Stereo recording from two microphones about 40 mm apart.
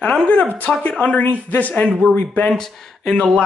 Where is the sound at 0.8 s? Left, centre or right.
Left.